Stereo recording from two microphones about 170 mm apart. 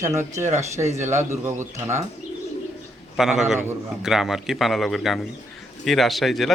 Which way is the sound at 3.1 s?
Centre (ahead or behind).